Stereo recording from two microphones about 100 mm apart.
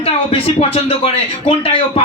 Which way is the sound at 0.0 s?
75° left (ahead or behind).